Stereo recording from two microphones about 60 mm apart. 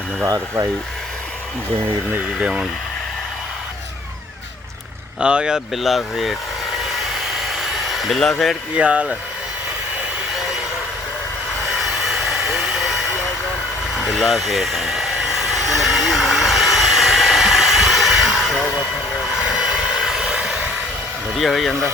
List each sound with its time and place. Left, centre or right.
0.3 s speech: right
2.4 s speech: centre
5.2 s speech: centre
5.7 s speech: centre
7.6 s a sound: centre
8.7 s speech: right
11.7 s vehicle: centre
14.0 s a sound: centre
19.5 s vehicle: centre
21.3 s speech: centre